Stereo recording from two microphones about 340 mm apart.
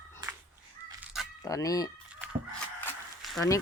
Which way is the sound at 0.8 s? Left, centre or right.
Centre.